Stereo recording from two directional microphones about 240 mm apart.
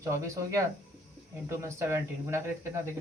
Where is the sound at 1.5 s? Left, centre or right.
Centre.